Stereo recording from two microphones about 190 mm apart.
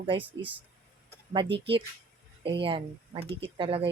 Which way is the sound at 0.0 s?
25° right (ahead or behind).